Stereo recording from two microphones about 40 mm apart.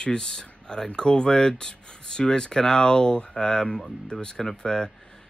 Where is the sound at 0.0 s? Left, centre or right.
Left.